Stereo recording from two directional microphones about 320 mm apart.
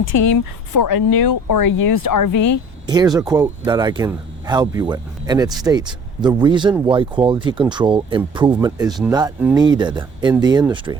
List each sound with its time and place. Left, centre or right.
0.2 s speech: left
2.8 s a man's voice: centre